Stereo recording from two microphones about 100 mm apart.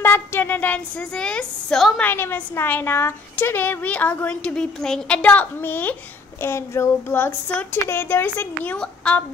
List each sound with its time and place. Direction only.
0.0 s a woman's voice: 20° left (ahead or behind); by 2.0 s 5° left (ahead or behind)
2.0 s a woman's voice: 20° left (ahead or behind)
8.7 s a woman's voice: 10° left (ahead or behind)